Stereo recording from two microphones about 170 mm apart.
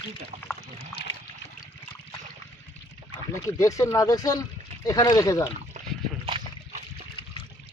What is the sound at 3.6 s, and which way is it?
Speech, 20° left (ahead or behind).